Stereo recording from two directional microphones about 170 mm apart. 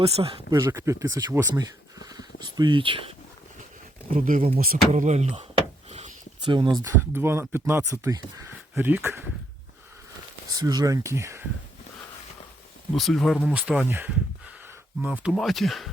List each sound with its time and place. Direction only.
0.0 s speech: 35° right (ahead or behind)
4.6 s speech: 60° right (ahead or behind)
5.0 s speech: 40° right (ahead or behind)
5.9 s a sound: 40° right (ahead or behind)
6.5 s speech: 30° right (ahead or behind)
6.8 s speech: 15° right (ahead or behind)
10.5 s speech: 25° right (ahead or behind)
12.9 s speech: centre (ahead or behind)